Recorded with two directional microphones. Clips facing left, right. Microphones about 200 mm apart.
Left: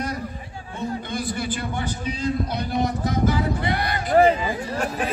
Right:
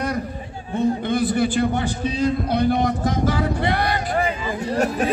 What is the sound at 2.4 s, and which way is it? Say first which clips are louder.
Speech: right 6 dB; 55° right (ahead or behind).